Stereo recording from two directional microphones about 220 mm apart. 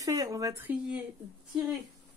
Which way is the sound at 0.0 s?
15° right (ahead or behind).